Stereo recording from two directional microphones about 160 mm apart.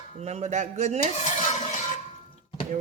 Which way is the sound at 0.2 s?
45° right (ahead or behind).